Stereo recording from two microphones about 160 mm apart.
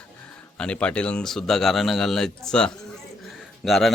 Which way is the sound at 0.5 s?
5° left (ahead or behind).